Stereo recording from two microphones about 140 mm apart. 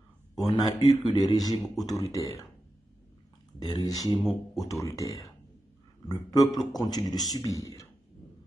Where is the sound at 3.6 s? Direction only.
25° left (ahead or behind).